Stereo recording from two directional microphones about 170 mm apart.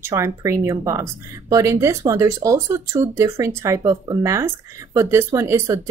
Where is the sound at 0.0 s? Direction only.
15° right (ahead or behind).